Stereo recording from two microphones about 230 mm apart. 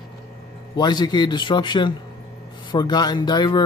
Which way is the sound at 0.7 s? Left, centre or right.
Centre.